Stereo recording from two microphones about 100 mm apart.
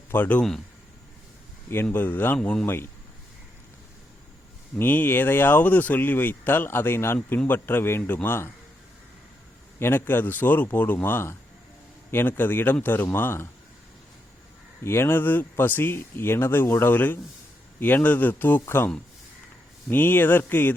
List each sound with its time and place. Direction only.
0.1 s a man's voice: 15° left (ahead or behind)
1.7 s speech: 20° left (ahead or behind)
4.8 s speech: 20° left (ahead or behind)
9.7 s speech: 20° left (ahead or behind)
14.8 s speech: 25° left (ahead or behind)
19.9 s speech: 20° left (ahead or behind)